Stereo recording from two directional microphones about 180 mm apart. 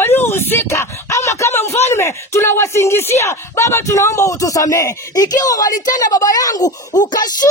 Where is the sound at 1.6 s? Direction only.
35° left (ahead or behind).